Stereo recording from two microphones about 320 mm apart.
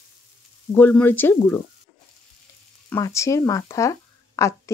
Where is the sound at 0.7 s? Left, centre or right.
Centre.